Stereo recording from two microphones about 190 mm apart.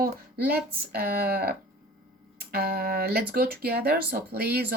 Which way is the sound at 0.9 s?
55° right (ahead or behind).